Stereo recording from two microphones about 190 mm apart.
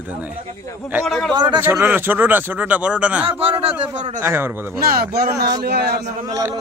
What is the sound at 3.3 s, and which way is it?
Speech, 30° right (ahead or behind).